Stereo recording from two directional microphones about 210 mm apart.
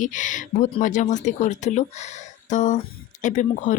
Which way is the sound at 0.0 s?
35° left (ahead or behind).